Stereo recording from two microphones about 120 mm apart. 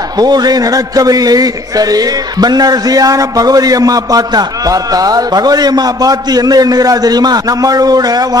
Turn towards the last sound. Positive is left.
turn(degrees=-30)  # may be behind; listen again after turning